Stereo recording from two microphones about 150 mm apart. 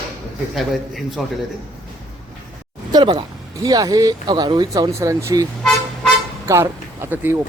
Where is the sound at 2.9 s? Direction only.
30° right (ahead or behind).